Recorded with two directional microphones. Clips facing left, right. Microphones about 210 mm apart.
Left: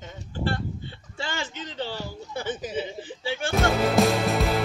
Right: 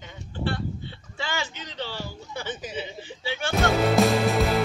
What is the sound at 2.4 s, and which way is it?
Speech, 50° left (ahead or behind).